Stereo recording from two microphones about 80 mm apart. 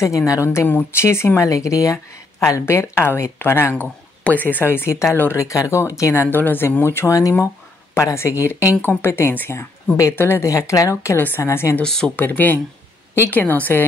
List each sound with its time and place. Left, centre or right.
0.6 s speech: left
1.4 s speech: left
5.4 s speech: left
6.3 s speech: left
9.5 s speech: left
10.1 s speech: left
10.4 s speech: left
11.1 s speech: left
11.8 s speech: centre
12.2 s speech: left